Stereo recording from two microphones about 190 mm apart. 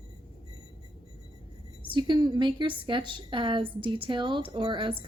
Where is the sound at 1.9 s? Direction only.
25° right (ahead or behind).